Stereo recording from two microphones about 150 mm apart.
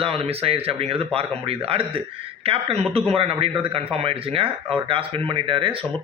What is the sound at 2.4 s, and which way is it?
Speech, 40° right (ahead or behind).